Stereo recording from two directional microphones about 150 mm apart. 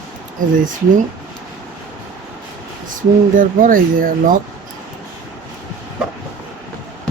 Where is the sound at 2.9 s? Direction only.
65° right (ahead or behind).